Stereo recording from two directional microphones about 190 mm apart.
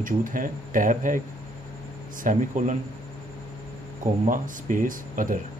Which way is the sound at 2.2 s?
40° right (ahead or behind).